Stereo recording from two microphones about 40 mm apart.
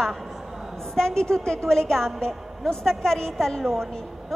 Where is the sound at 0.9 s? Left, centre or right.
Centre.